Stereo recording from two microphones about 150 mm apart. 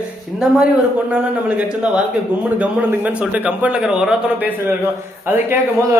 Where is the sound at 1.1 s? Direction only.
10° right (ahead or behind).